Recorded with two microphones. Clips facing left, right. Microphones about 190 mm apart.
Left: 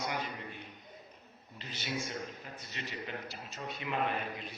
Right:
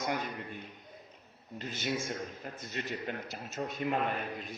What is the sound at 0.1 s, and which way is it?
A man's voice, 50° right (ahead or behind).